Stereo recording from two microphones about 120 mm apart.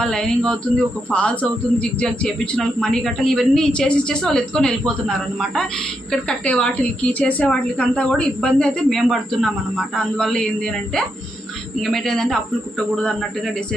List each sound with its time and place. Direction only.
0.0 s a man's voice: 5° left (ahead or behind)
11.9 s speech: 5° left (ahead or behind)